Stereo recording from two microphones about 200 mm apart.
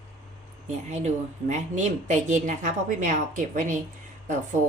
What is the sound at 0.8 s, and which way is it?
A woman's voice, 35° right (ahead or behind).